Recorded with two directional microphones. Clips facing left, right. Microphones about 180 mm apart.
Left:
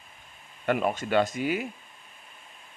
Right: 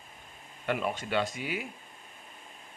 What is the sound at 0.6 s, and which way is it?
Speech, 50° left (ahead or behind).